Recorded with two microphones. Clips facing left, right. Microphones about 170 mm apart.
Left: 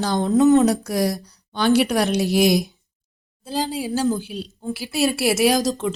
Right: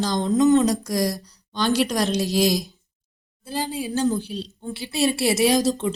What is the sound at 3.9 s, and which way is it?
A woman's voice, 5° left (ahead or behind).